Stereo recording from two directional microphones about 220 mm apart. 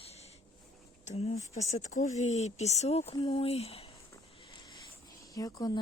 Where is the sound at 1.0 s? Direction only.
30° left (ahead or behind).